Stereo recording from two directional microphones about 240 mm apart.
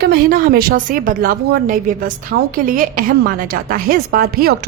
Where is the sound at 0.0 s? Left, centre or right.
Right.